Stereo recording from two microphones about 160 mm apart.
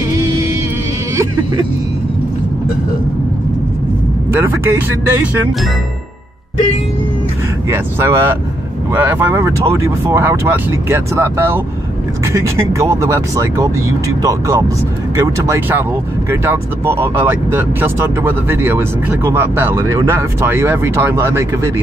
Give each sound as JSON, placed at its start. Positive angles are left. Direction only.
{"t": 4.3, "sound": "speech", "side_deg": -15}
{"t": 7.7, "sound": "speech", "side_deg": -15}